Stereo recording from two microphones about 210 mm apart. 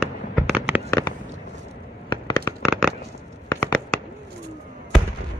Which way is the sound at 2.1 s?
20° left (ahead or behind).